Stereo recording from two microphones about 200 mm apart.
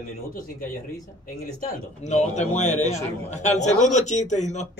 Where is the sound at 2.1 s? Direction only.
35° left (ahead or behind).